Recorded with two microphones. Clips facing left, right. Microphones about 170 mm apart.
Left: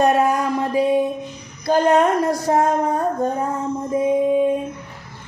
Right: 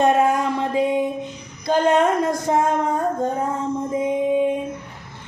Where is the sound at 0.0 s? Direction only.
25° right (ahead or behind).